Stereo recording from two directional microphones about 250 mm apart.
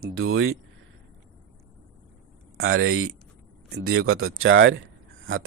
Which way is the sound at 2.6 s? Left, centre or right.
Right.